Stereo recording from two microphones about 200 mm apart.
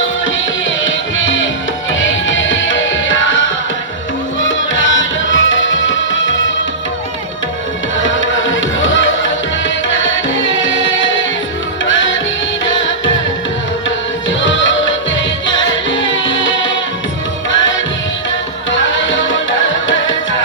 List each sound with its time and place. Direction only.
0.9 s music: 70° left (ahead or behind)
8.0 s music: 70° left (ahead or behind)
14.3 s music: 70° left (ahead or behind)